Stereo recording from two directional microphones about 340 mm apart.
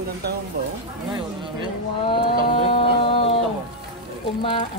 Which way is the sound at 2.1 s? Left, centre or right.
Centre.